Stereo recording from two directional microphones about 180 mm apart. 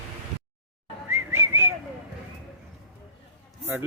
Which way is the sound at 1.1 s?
15° right (ahead or behind).